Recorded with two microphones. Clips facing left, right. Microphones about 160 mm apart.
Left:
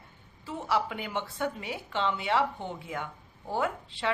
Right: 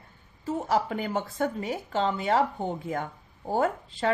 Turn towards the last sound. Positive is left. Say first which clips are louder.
# right 4 dB
turn(degrees=-40)  # may be behind; listen again after turning